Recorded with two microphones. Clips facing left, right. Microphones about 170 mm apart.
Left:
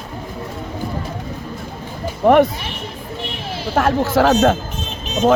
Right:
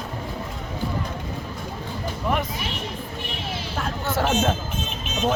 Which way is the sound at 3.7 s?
85° left.